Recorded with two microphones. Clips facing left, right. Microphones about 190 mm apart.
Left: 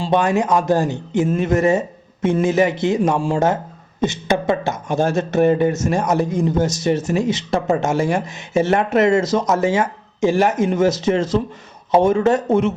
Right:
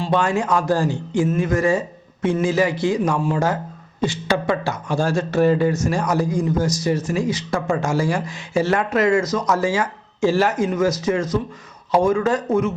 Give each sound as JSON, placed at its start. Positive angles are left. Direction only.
{"t": 0.0, "sound": "speech", "side_deg": 20}